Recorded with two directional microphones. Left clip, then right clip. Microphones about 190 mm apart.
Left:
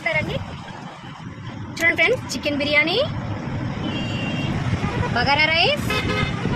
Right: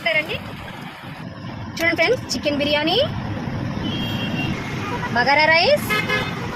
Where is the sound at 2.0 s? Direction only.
10° right (ahead or behind).